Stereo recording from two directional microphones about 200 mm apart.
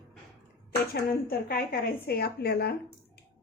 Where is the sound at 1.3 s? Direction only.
50° left (ahead or behind).